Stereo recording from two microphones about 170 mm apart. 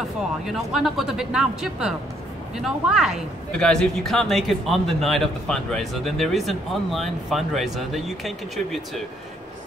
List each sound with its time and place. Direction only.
0.5 s speech: centre (ahead or behind)